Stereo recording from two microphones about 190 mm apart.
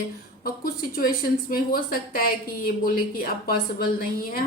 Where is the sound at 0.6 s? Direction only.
50° left (ahead or behind).